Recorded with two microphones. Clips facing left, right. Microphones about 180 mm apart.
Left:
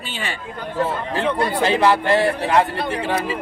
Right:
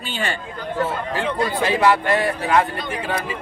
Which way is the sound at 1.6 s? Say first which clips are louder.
Left 1 dB; 30° left (ahead or behind).